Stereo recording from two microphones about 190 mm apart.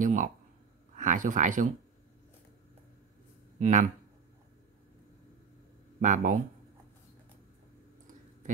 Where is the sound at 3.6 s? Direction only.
40° right (ahead or behind).